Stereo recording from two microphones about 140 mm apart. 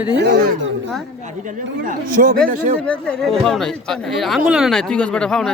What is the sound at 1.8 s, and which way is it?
Speech, 75° right (ahead or behind).